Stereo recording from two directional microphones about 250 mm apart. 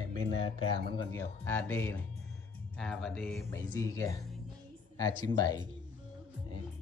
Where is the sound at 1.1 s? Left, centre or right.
Centre.